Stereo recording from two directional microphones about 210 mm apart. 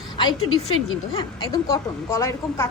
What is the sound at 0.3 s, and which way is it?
Speech, 85° left.